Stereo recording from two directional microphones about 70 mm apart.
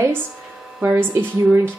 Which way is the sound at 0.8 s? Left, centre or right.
Right.